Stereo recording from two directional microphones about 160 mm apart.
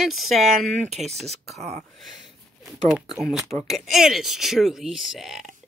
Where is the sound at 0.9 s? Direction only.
45° right (ahead or behind).